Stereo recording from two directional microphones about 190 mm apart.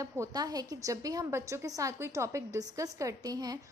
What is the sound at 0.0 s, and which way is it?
A woman's voice, 20° right (ahead or behind).